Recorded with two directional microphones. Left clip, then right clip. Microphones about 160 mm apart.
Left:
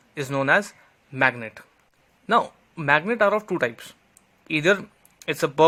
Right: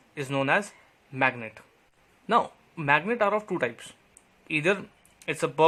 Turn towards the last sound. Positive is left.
turn(degrees=25)  # may be behind; listen again after turning